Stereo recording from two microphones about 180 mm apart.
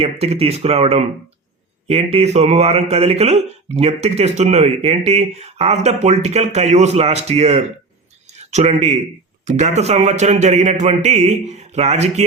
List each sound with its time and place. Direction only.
0.0 s speech: 35° right (ahead or behind)
8.3 s a sound: 40° right (ahead or behind)
9.4 s speech: 40° right (ahead or behind)